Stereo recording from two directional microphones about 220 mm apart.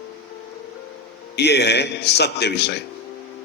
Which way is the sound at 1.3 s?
50° left (ahead or behind).